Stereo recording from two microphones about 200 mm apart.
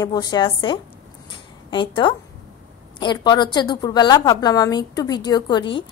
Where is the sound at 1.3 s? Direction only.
25° left (ahead or behind).